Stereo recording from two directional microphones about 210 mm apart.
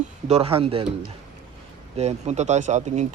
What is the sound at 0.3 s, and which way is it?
Speech, 30° right (ahead or behind).